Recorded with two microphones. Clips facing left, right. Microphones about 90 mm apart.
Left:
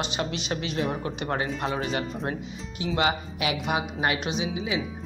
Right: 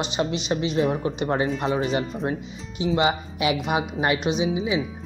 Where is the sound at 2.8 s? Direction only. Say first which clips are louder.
Right 4 dB; 20° right (ahead or behind).